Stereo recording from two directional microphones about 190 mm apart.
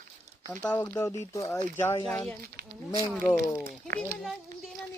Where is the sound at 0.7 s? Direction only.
15° left (ahead or behind).